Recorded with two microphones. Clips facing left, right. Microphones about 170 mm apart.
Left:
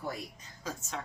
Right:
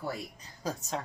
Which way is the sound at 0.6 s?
35° right (ahead or behind).